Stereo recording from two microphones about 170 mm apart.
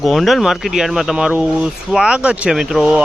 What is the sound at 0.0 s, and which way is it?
Speech, centre (ahead or behind).